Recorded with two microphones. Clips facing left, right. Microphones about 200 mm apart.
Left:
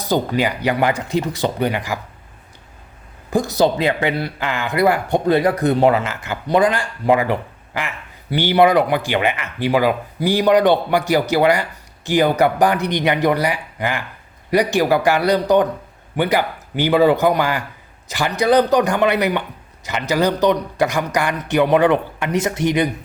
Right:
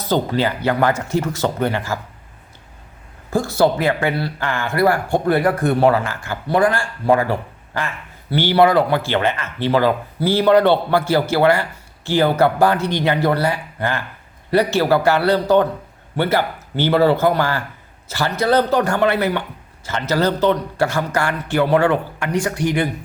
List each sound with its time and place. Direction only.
0.0 s speech: 15° left (ahead or behind)
3.2 s speech: 15° left (ahead or behind)